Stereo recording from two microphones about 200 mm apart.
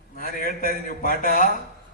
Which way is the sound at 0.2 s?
45° left (ahead or behind).